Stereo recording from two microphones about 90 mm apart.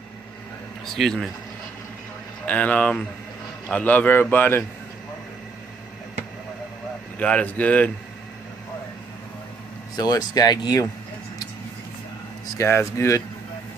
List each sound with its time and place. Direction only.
0.8 s speech: 5° left (ahead or behind)
2.4 s a man's voice: 15° left (ahead or behind)
7.2 s speech: 15° left (ahead or behind)
9.9 s speech: 45° left (ahead or behind)
12.5 s speech: 30° left (ahead or behind)